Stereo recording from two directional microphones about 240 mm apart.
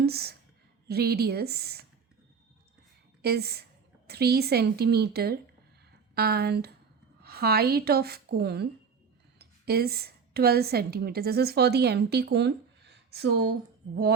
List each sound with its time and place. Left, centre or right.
0.0 s a woman's voice: right
3.2 s a woman's voice: right